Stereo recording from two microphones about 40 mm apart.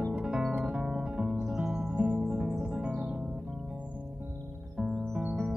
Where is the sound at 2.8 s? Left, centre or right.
Right.